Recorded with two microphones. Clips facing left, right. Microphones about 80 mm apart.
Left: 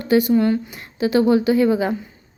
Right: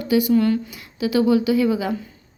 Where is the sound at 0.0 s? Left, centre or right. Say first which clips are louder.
Left 2 dB; left.